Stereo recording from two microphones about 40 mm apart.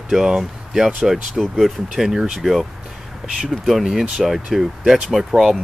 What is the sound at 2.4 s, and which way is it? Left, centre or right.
Speech, centre.